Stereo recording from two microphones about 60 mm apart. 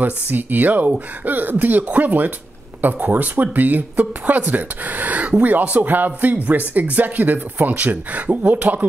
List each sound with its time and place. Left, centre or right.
0.0 s speech: right